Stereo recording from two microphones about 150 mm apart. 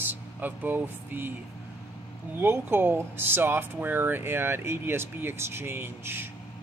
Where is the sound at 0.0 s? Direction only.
10° right (ahead or behind).